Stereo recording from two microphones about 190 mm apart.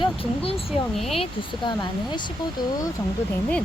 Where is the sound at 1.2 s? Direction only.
25° left (ahead or behind).